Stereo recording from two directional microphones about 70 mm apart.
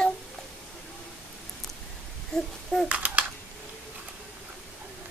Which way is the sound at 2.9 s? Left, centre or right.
Centre.